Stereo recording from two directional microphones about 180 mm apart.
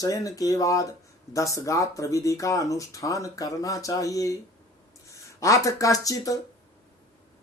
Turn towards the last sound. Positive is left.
turn(degrees=20)  # may be behind; listen again after turning